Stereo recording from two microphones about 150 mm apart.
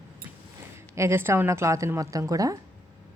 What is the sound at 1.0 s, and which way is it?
Speech, 15° right (ahead or behind).